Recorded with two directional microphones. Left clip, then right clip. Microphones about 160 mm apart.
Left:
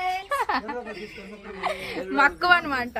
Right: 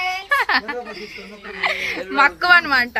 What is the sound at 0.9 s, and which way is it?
Speech, 20° left (ahead or behind).